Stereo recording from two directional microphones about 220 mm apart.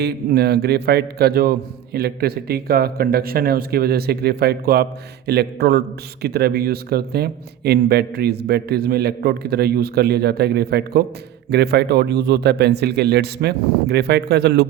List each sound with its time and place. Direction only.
0.0 s a man's voice: 45° right (ahead or behind)